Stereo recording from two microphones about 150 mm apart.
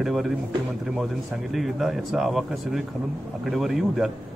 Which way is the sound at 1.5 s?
Centre (ahead or behind).